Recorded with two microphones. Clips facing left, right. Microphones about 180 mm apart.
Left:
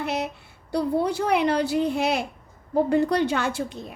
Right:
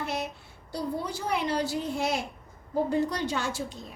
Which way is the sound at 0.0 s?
70° left (ahead or behind).